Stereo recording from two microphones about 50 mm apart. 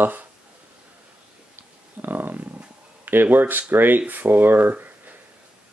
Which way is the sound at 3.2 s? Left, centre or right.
Right.